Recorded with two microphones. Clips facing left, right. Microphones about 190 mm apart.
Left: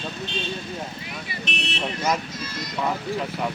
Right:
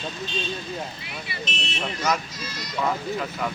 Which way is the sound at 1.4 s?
65° left (ahead or behind).